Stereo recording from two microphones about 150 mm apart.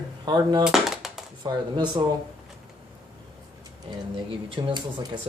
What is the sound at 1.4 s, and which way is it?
Speech, 30° right (ahead or behind).